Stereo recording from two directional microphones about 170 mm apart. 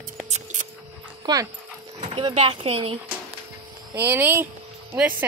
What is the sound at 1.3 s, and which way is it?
Speech, 25° right (ahead or behind).